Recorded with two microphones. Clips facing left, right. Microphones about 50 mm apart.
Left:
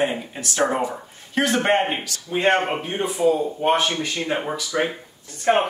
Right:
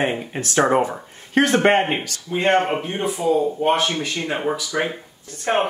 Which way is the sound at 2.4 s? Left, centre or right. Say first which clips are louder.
Right 2 dB; left.